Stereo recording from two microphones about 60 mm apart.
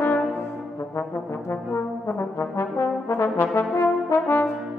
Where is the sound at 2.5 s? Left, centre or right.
Left.